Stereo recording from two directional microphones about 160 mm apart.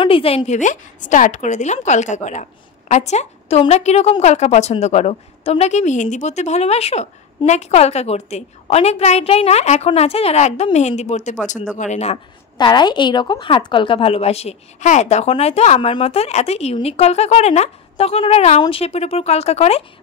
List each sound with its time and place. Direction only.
0.0 s a woman's voice: 35° left (ahead or behind)
12.5 s speech: 30° left (ahead or behind)